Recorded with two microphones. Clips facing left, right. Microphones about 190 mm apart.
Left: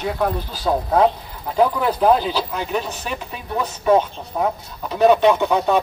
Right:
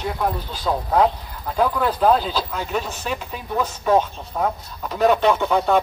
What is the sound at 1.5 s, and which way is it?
Speech, 15° left (ahead or behind).